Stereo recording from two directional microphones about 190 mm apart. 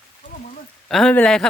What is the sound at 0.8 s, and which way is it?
Speech, centre (ahead or behind).